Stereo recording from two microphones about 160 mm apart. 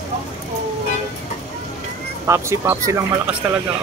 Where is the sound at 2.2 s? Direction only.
20° right (ahead or behind).